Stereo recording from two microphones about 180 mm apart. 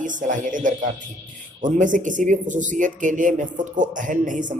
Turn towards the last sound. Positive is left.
turn(degrees=-45)  # may be behind; listen again after turning